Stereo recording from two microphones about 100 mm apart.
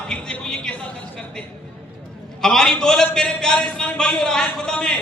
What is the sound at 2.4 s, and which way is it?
A man's voice, 5° left (ahead or behind).